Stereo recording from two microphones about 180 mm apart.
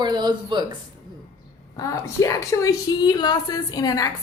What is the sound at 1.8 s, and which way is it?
A woman's voice, 20° left (ahead or behind).